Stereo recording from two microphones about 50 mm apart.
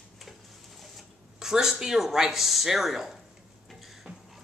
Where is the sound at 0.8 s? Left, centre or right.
Centre.